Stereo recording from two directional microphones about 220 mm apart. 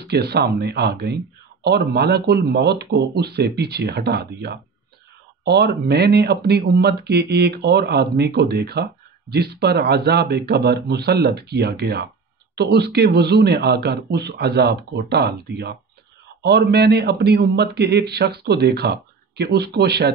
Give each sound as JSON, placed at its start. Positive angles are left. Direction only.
{"t": 0.1, "sound": "speech", "side_deg": -45}